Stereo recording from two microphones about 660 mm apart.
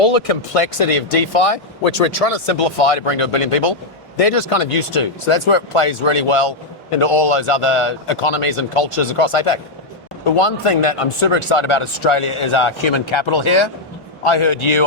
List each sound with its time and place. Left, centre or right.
0.0 s speech: left